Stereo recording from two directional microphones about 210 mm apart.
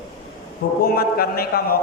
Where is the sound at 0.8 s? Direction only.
45° left (ahead or behind).